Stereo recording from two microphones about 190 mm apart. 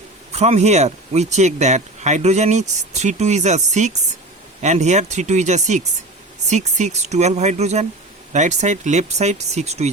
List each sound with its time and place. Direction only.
0.3 s speech: 35° right (ahead or behind)